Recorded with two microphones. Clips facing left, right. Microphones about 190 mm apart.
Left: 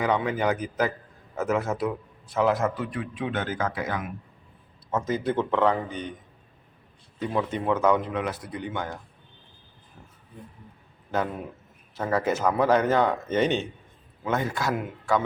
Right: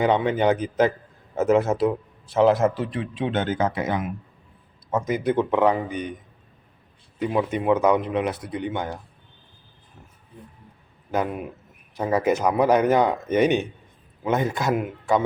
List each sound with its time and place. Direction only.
0.0 s a man's voice: 25° right (ahead or behind)
7.2 s a man's voice: 15° right (ahead or behind)
11.1 s a man's voice: 15° right (ahead or behind)